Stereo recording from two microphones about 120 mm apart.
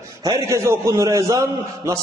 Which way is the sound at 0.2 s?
30° right (ahead or behind).